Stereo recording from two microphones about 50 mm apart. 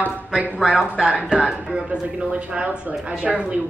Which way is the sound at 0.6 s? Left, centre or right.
Centre.